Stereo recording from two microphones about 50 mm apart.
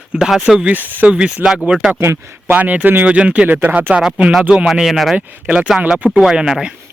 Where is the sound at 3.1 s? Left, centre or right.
Right.